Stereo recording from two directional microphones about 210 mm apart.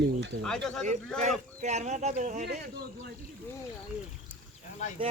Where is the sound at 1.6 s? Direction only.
35° right (ahead or behind).